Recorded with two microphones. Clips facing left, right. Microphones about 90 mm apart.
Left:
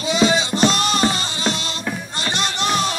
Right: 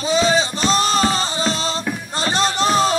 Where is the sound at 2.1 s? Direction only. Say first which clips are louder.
Right 7 dB; 35° right (ahead or behind).